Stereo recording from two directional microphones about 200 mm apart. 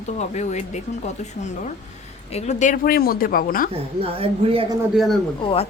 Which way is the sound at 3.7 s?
30° right (ahead or behind).